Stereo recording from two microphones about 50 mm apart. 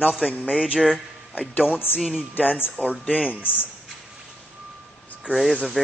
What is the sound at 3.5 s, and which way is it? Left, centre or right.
Speech, left.